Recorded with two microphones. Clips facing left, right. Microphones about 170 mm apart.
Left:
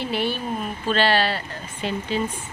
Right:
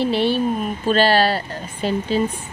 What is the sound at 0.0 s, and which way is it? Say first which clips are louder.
Speech: right 7 dB; 30° right (ahead or behind).